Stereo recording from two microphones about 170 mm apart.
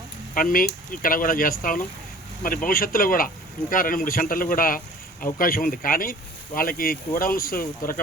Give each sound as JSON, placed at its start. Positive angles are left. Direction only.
{"t": 0.3, "sound": "speech", "side_deg": 55}